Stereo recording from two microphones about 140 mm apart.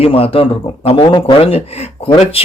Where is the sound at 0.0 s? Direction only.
40° left (ahead or behind).